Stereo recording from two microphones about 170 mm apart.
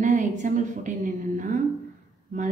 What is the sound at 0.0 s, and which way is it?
A woman's voice, 45° right (ahead or behind).